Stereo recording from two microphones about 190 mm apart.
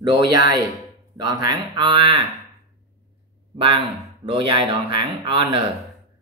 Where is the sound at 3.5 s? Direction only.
25° right (ahead or behind).